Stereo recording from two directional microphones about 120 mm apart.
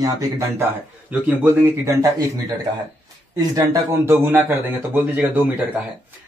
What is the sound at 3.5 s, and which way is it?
A man's voice, 25° right (ahead or behind).